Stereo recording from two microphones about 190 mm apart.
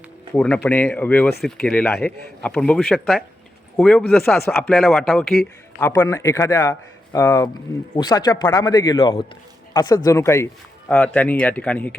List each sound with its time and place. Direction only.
0.3 s speech: 5° left (ahead or behind)
5.8 s speech: 15° left (ahead or behind)